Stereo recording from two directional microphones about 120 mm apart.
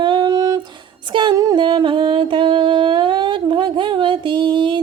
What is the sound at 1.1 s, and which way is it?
Music, 40° right (ahead or behind).